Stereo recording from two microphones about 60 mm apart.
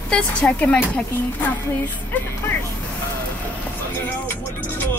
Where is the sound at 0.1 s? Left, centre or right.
Centre.